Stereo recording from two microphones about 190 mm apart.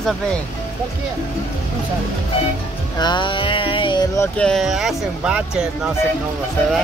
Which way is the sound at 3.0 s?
25° left (ahead or behind).